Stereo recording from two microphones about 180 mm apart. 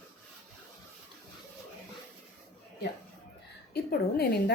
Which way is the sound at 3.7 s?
60° left (ahead or behind).